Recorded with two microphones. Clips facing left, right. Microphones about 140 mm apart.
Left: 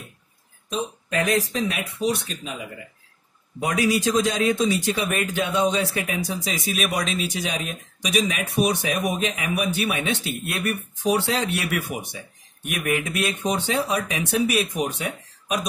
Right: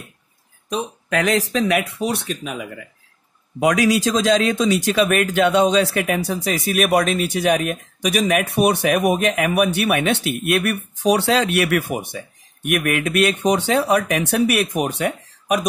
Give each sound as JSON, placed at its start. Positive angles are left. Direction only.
{"t": 0.7, "sound": "a man's voice", "side_deg": -75}
{"t": 3.5, "sound": "a man's voice", "side_deg": -90}
{"t": 12.6, "sound": "a man's voice", "side_deg": -70}